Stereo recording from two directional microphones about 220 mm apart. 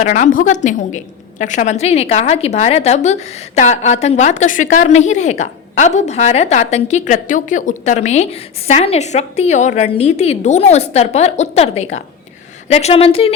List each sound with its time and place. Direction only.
0.0 s a woman's voice: 35° left (ahead or behind)